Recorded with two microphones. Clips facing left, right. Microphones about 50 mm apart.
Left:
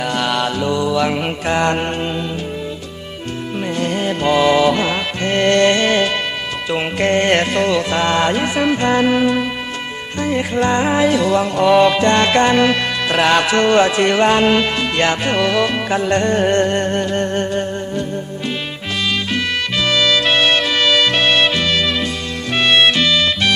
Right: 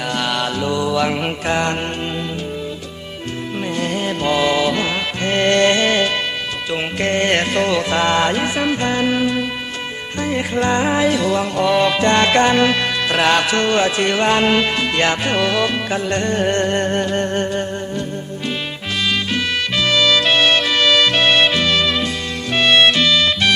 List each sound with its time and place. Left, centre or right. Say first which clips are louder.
0.0 s mantra: left 2 dB; centre
1.6 s music: left 4 dB; centre
3.8 s music: left 2 dB; centre; by 4.8 s left
4.8 s music: left 2 dB; centre
5.2 s music: left 1 dB; centre
6.7 s music: left 4 dB; centre
8.9 s music: left 3 dB; centre
10.2 s music: left 2 dB; centre
11.9 s music: left 1 dB; centre
14.3 s music: left 1 dB; centre
15.9 s music: left 4 dB; centre
16.6 s music: left 1 dB; centre
21.3 s music: even; centre
22.7 s music: even; left